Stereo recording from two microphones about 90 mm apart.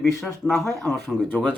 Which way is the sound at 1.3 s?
20° left (ahead or behind).